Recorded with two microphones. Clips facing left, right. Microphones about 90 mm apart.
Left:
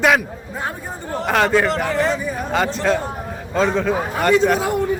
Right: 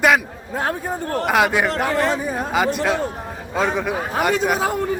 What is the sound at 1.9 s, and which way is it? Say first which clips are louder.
Speech: even; 55° right (ahead or behind).